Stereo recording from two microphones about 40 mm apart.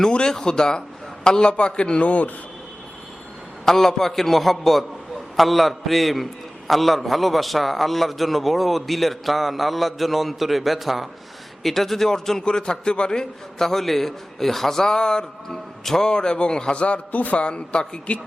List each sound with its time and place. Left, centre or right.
0.0 s a man's voice: centre
2.0 s a man's voice: left
3.7 s a man's voice: centre
14.8 s a man's voice: centre
15.5 s a man's voice: centre
16.0 s a man's voice: centre; by 17.4 s left
17.4 s a man's voice: left